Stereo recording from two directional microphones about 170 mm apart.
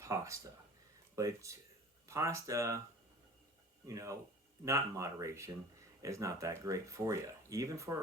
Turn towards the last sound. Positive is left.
turn(degrees=-20)  # may be behind; listen again after turning